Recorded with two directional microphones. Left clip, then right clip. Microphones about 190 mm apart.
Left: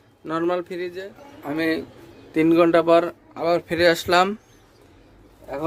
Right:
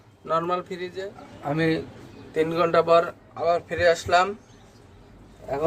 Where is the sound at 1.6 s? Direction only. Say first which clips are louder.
Left 1 dB; 55° left (ahead or behind).